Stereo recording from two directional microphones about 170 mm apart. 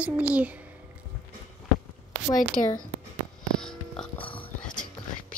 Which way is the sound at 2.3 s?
50° left (ahead or behind).